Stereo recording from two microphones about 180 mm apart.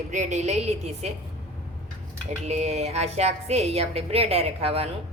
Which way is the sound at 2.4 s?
35° right (ahead or behind).